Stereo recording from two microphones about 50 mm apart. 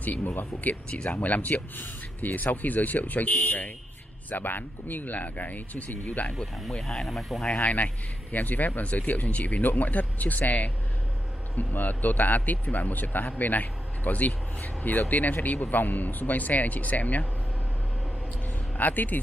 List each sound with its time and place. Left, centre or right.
0.0 s speech: left
0.8 s speech: left
1.1 s speech: left
6.3 s speech: centre
7.5 s speech: left
18.8 s speech: left